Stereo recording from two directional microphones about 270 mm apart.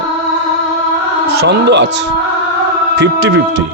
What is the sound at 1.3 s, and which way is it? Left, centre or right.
A man's voice, right.